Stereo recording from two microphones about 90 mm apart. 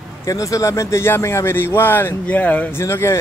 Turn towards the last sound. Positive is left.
turn(degrees=30)  # may be behind; listen again after turning